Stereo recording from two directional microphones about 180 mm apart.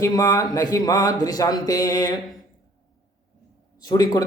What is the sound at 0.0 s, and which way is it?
A man's voice, 20° left (ahead or behind).